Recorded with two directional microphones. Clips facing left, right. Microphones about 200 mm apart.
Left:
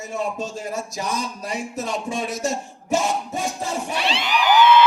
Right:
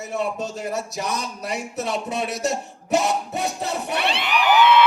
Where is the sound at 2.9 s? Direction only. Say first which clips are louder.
Right 1 dB; 65° right (ahead or behind).